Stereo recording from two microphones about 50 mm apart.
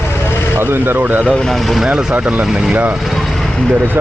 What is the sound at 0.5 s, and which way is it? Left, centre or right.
Speech, right.